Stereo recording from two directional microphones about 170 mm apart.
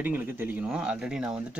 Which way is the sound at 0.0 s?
10° right (ahead or behind).